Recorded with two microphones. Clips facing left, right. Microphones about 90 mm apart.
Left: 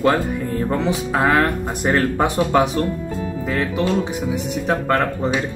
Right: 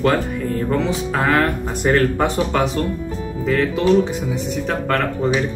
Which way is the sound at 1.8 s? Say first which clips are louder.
Right 2 dB; 10° left (ahead or behind).